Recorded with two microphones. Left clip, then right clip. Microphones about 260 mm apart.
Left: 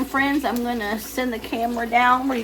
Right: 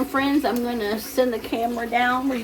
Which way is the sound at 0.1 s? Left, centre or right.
Left.